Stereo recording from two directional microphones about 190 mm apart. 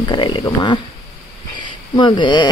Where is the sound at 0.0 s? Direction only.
25° left (ahead or behind).